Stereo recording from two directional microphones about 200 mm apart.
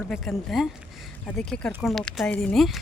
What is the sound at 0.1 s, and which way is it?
Speech, centre (ahead or behind).